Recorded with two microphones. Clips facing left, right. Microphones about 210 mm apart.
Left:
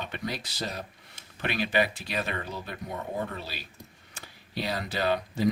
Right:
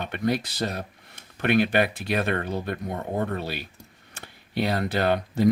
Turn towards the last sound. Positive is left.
turn(degrees=-55)  # may be behind; listen again after turning